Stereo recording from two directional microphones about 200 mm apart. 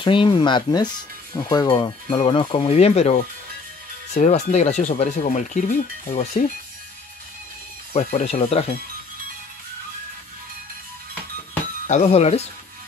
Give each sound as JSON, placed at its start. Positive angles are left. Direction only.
{"t": 0.0, "sound": "speech", "side_deg": 25}
{"t": 7.9, "sound": "speech", "side_deg": 35}
{"t": 11.9, "sound": "speech", "side_deg": 30}